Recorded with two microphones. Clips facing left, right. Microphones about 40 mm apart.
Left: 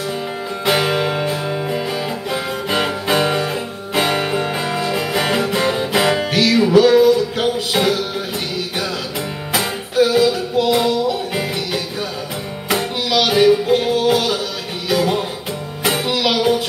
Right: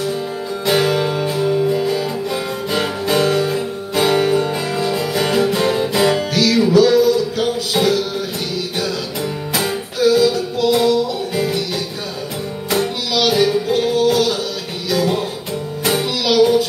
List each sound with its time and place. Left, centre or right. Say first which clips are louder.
0.7 s music: right 1 dB; left
9.9 s music: even; left